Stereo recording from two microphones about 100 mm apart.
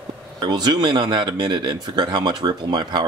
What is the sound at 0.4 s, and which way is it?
Speech, 45° right (ahead or behind).